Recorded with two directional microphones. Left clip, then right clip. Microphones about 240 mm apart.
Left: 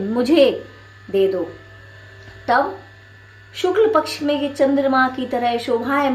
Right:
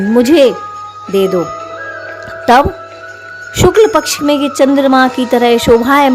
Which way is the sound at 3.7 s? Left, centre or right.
Right.